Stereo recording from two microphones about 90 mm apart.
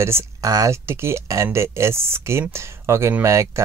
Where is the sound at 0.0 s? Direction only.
30° right (ahead or behind).